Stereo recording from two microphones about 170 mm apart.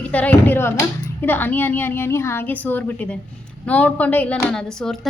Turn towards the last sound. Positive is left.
turn(degrees=5)  # may be behind; listen again after turning